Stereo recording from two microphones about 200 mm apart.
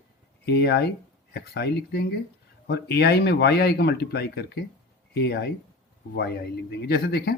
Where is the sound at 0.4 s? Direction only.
55° left (ahead or behind).